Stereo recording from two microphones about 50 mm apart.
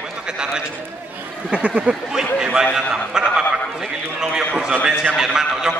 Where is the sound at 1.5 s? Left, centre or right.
Right.